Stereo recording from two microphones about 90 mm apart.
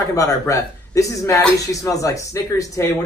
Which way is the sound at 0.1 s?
40° left (ahead or behind).